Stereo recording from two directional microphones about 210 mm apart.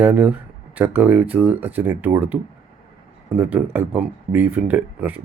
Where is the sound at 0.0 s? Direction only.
10° right (ahead or behind).